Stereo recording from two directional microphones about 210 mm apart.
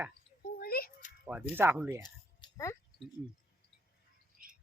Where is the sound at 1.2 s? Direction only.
10° right (ahead or behind).